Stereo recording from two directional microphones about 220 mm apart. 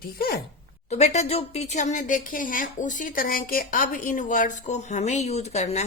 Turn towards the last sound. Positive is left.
turn(degrees=30)  # may be behind; listen again after turning